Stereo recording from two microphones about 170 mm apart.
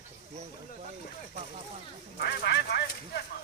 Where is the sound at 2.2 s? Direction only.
70° left (ahead or behind).